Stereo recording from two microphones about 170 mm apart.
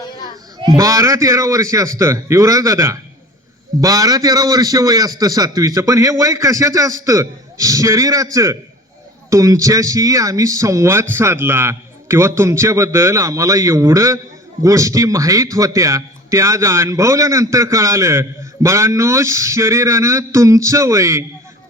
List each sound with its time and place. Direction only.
0.8 s a man's voice: 20° right (ahead or behind)